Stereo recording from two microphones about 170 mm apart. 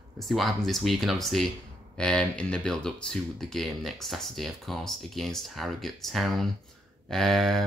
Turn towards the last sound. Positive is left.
turn(degrees=0)  # may be behind; listen again after turning